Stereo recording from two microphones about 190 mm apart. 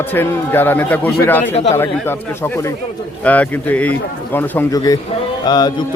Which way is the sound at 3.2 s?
10° left (ahead or behind).